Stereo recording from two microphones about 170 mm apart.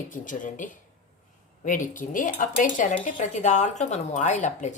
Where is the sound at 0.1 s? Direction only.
50° left (ahead or behind).